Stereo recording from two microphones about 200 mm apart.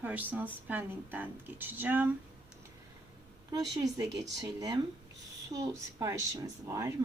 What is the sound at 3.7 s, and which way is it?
A woman's voice, 15° right (ahead or behind).